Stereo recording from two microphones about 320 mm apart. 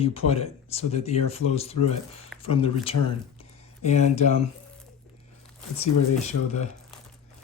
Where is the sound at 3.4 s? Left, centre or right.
Left.